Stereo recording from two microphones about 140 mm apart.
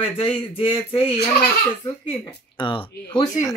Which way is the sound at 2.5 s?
35° left (ahead or behind).